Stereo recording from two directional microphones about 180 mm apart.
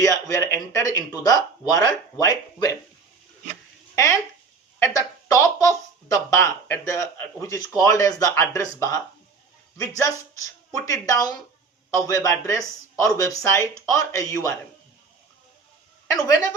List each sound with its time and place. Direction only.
0.0 s speech: 20° left (ahead or behind)
3.9 s speech: 15° left (ahead or behind)
16.2 s speech: 20° left (ahead or behind)